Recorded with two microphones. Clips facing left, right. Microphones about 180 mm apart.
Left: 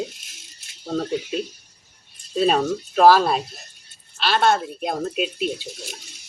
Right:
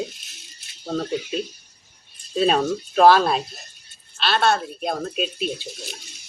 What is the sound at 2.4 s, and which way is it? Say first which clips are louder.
Speech: even; 5° left (ahead or behind).